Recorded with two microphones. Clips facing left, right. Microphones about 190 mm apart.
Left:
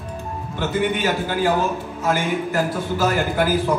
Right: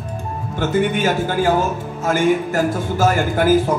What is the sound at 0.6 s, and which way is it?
A man's voice, 45° right (ahead or behind).